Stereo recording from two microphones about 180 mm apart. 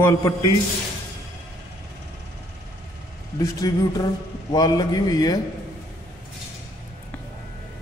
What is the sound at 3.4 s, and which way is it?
A man's voice, 20° left (ahead or behind).